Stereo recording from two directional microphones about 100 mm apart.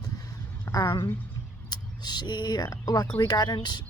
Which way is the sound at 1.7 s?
45° left (ahead or behind).